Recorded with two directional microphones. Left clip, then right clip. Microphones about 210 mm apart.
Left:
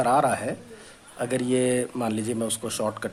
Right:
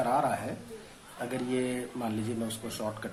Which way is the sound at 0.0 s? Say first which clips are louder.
Left 7 dB; 55° left (ahead or behind).